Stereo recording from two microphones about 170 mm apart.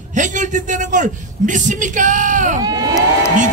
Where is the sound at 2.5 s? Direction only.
20° right (ahead or behind).